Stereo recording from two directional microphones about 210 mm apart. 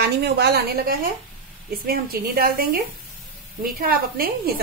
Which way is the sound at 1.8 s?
45° right (ahead or behind).